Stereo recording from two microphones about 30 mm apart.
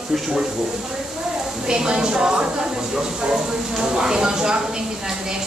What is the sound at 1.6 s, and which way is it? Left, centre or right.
Speech, right.